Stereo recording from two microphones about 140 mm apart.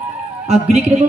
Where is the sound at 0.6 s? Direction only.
55° right (ahead or behind).